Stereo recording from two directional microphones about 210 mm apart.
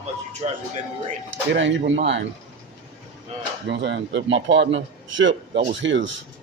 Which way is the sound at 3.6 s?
55° right (ahead or behind).